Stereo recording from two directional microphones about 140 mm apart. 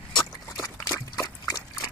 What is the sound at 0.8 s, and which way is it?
Liquid, 25° left (ahead or behind).